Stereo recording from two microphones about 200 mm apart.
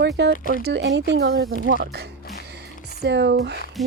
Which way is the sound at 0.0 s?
55° right (ahead or behind).